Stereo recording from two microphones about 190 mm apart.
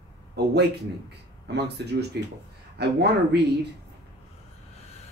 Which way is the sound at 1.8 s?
65° right (ahead or behind).